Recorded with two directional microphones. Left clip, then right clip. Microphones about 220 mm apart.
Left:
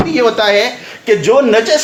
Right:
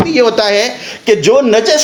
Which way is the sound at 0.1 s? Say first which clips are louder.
Even; 45° right (ahead or behind).